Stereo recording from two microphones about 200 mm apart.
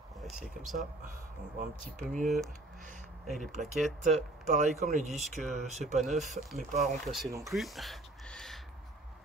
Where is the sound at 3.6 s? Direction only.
Centre (ahead or behind).